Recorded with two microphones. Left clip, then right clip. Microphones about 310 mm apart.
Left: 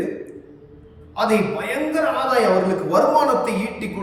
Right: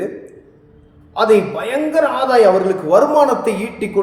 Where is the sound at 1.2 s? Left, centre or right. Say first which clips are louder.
Right 6 dB; centre.